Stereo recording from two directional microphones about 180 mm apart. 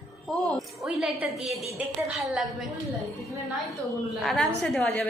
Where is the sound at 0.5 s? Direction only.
5° right (ahead or behind).